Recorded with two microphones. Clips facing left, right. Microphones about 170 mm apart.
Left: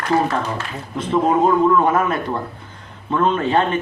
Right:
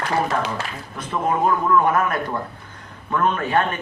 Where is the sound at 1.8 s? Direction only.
25° left (ahead or behind).